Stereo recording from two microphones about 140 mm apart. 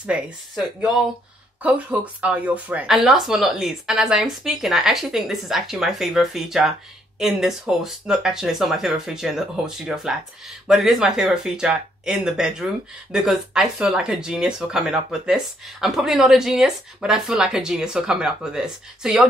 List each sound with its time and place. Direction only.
0.0 s speech: 10° right (ahead or behind)